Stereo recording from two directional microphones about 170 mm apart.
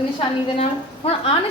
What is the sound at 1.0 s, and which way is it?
Speech, 35° left (ahead or behind).